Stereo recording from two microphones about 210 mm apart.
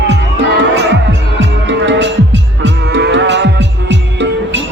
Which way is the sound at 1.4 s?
60° right (ahead or behind).